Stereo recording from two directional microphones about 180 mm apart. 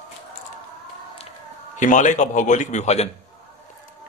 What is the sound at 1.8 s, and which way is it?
A man's voice, 45° left (ahead or behind).